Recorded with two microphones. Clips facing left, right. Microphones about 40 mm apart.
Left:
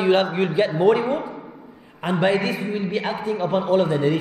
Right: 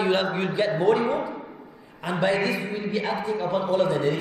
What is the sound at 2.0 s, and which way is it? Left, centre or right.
A man's voice, left.